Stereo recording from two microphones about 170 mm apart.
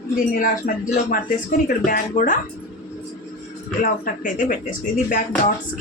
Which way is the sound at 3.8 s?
55° left (ahead or behind).